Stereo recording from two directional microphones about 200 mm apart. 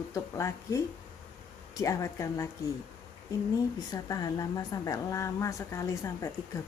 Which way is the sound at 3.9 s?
15° left (ahead or behind).